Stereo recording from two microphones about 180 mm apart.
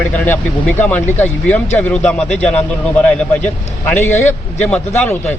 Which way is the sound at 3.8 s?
10° left (ahead or behind).